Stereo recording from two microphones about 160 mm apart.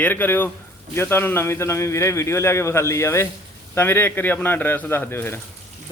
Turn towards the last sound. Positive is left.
turn(degrees=15)  # may be behind; listen again after turning